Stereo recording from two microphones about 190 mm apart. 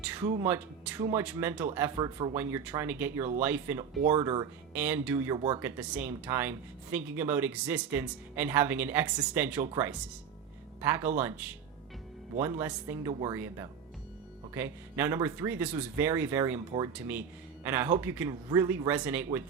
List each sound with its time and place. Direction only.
0.0 s speech: 10° right (ahead or behind)
2.0 s speech: 20° right (ahead or behind)
5.6 s speech: 10° right (ahead or behind)